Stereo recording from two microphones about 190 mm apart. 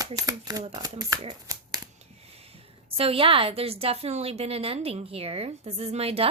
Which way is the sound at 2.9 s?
30° right (ahead or behind).